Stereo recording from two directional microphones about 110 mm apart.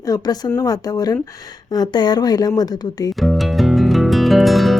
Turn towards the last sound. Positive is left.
turn(degrees=0)  # may be behind; listen again after turning